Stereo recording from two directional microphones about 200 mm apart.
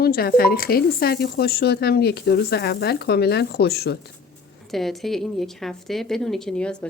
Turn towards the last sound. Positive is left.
turn(degrees=5)  # may be behind; listen again after turning